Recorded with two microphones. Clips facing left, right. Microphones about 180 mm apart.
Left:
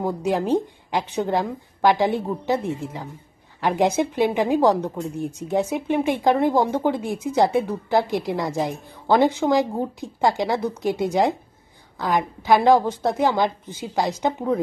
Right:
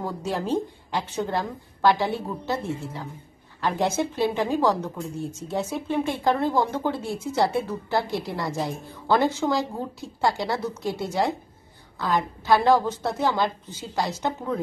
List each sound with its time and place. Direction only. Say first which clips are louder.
0.0 s speech: left 6 dB; 15° left (ahead or behind)